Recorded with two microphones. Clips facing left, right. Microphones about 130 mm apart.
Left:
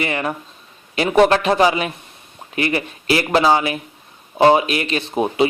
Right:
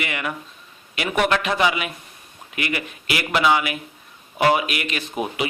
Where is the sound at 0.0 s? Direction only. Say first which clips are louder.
Left 6 dB; 35° left (ahead or behind).